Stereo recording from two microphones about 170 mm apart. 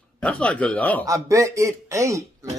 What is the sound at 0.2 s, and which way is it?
Speech, 5° left (ahead or behind).